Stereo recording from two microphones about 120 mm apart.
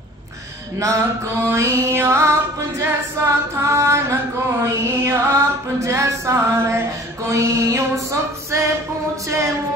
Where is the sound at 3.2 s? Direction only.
25° right (ahead or behind).